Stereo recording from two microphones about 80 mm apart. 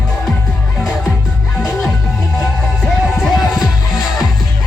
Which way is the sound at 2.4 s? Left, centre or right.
Centre.